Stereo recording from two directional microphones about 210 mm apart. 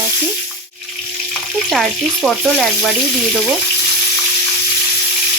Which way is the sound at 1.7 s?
Centre (ahead or behind).